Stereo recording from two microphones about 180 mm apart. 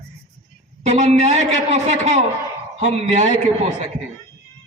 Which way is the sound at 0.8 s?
40° right (ahead or behind).